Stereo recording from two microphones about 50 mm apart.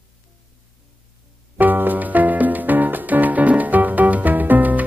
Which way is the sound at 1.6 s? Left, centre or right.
Right.